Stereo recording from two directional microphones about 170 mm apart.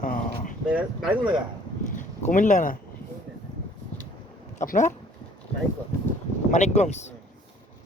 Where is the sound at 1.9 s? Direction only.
50° left (ahead or behind).